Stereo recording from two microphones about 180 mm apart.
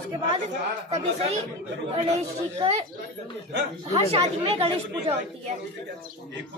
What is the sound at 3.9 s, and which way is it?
Speech, 30° right (ahead or behind).